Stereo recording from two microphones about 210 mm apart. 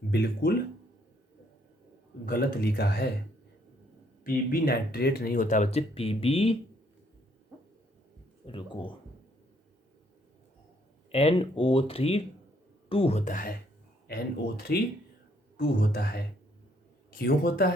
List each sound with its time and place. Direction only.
0.1 s speech: 50° left (ahead or behind)
2.2 s speech: 45° left (ahead or behind)
4.2 s speech: 45° left (ahead or behind); by 6.6 s 30° left (ahead or behind)
8.4 s speech: 25° left (ahead or behind)
11.1 s speech: 30° left (ahead or behind); by 17.7 s 45° left (ahead or behind)